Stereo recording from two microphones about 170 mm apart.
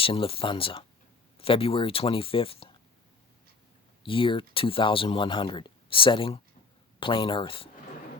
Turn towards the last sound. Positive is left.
turn(degrees=30)  # may be behind; listen again after turning